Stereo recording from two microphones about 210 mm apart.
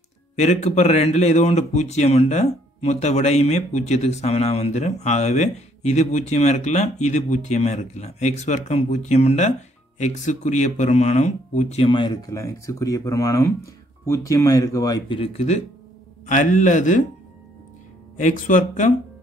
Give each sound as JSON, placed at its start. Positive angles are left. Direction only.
{"t": 0.4, "sound": "a man's voice", "side_deg": 30}
{"t": 18.2, "sound": "a man's voice", "side_deg": 40}